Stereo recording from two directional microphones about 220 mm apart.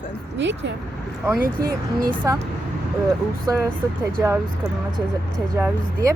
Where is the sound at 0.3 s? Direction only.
55° right (ahead or behind).